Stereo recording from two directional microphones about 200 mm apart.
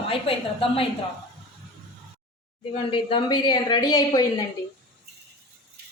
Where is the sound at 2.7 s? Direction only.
25° left (ahead or behind).